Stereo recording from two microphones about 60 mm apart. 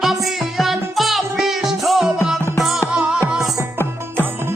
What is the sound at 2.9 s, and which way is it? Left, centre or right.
Music, centre.